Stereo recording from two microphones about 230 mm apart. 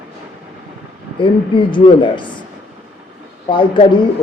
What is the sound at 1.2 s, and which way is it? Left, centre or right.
Speech, left.